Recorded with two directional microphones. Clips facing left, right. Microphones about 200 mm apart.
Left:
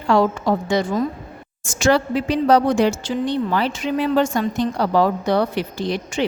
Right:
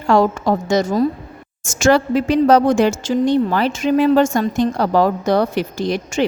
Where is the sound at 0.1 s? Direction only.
45° right (ahead or behind).